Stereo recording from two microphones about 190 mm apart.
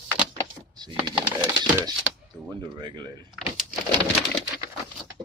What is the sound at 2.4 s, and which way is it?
Speech, 25° right (ahead or behind).